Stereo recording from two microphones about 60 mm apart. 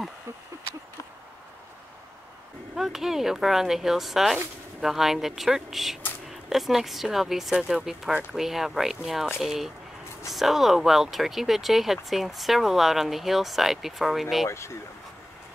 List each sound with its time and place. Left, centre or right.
2.7 s speech: centre
14.5 s speech: left